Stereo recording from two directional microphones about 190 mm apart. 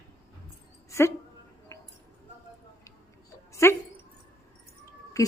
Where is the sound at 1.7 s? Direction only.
15° left (ahead or behind).